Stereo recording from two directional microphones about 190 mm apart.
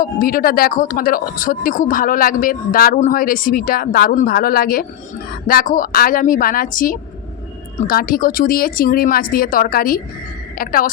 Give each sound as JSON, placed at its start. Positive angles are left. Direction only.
{"t": 0.0, "sound": "speech", "side_deg": 50}